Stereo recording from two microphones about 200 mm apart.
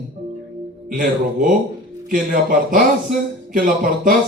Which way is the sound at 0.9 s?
40° right (ahead or behind).